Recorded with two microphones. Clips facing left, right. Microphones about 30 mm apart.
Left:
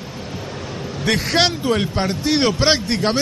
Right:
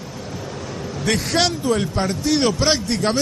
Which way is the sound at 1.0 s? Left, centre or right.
Centre.